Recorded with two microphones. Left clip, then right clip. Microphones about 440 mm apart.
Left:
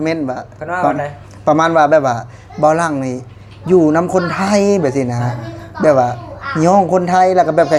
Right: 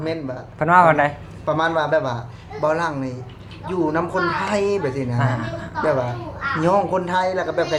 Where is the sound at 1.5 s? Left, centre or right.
Left.